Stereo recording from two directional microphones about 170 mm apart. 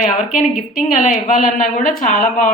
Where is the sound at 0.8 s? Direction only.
50° left (ahead or behind).